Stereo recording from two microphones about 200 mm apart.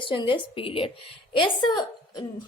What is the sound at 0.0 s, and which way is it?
A woman's voice, 25° left (ahead or behind).